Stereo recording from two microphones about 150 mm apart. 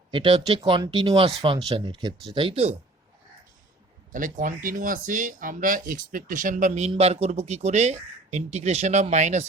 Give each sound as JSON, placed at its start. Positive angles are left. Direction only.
{"t": 0.1, "sound": "speech", "side_deg": -35}
{"t": 4.1, "sound": "speech", "side_deg": -65}